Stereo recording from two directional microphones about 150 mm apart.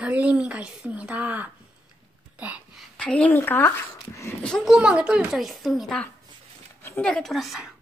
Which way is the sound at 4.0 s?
20° left (ahead or behind).